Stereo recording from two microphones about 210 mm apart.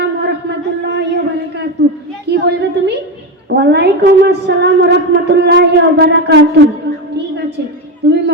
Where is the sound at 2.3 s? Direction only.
55° right (ahead or behind).